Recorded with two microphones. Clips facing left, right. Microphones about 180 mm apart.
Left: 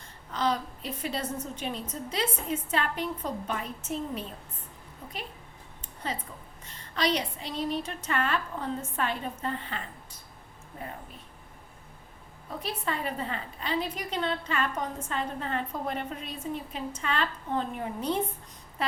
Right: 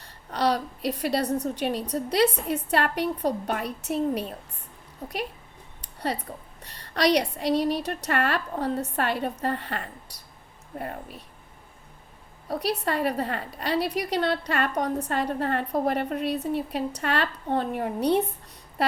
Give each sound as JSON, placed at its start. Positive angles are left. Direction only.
{"t": 0.3, "sound": "a woman's voice", "side_deg": -70}
{"t": 5.0, "sound": "speech", "side_deg": -40}
{"t": 5.8, "sound": "a woman's voice", "side_deg": -70}
{"t": 12.5, "sound": "a woman's voice", "side_deg": -75}